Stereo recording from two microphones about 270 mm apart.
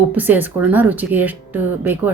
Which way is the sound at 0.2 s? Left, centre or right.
Centre.